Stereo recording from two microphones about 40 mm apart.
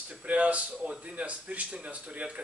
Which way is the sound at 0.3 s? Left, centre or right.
Right.